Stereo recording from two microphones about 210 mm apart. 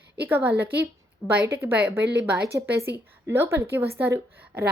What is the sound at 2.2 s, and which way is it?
A woman's voice, 10° right (ahead or behind).